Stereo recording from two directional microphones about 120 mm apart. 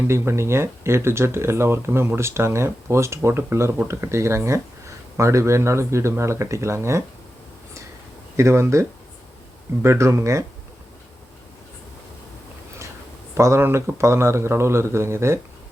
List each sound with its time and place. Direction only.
0.1 s speech: 20° right (ahead or behind)
8.4 s speech: 25° right (ahead or behind)
13.3 s speech: 20° right (ahead or behind)